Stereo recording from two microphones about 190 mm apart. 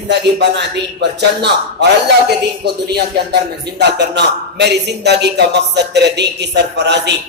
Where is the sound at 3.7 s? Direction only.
65° right (ahead or behind).